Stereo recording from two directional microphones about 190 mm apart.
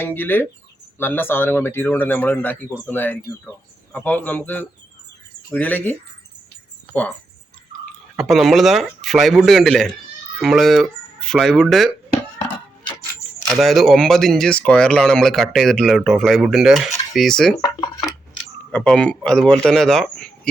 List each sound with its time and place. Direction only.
0.0 s speech: 10° left (ahead or behind)
8.1 s speech: centre (ahead or behind)
13.5 s speech: centre (ahead or behind)
17.6 s speech: 20° left (ahead or behind)
18.7 s speech: 5° left (ahead or behind)